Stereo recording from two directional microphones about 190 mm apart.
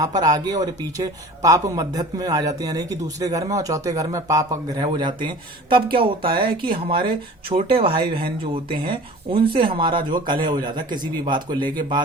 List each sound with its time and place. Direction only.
0.0 s speech: 20° right (ahead or behind)